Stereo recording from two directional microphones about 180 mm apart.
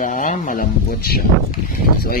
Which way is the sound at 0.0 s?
45° left (ahead or behind).